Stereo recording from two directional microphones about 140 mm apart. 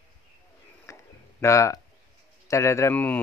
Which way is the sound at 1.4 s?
20° left (ahead or behind).